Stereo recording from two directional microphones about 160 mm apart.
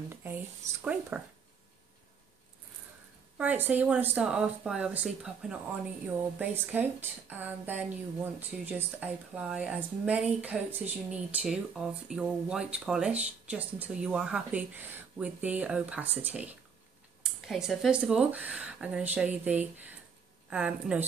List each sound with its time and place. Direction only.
0.1 s a sound: 15° right (ahead or behind)
1.1 s a woman's voice: 5° right (ahead or behind)
3.3 s a woman's voice: 10° right (ahead or behind)